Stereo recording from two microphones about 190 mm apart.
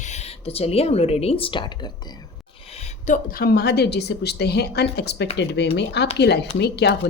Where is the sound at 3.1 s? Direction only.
50° left (ahead or behind).